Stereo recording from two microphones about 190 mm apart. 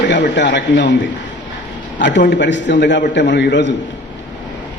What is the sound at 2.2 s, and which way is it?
Speech, 65° left (ahead or behind).